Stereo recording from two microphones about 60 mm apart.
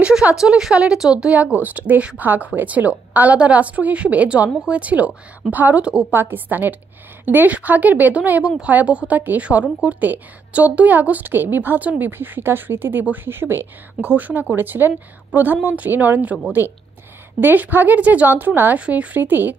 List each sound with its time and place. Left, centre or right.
0.4 s a woman's voice: centre
6.1 s a woman's voice: right
13.9 s a woman's voice: right
17.4 s a woman's voice: right